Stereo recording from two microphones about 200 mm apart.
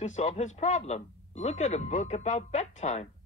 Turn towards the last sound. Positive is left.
turn(degrees=35)  # may be behind; listen again after turning